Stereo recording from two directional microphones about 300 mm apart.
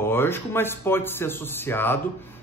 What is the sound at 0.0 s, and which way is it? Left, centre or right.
A man's voice, centre.